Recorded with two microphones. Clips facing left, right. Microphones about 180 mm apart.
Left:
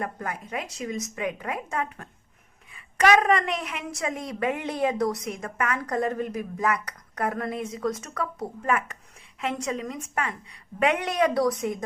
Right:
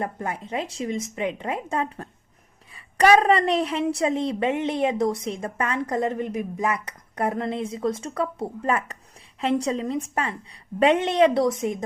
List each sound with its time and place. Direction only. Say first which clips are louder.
0.0 s a woman's voice: right 3 dB; 25° right (ahead or behind)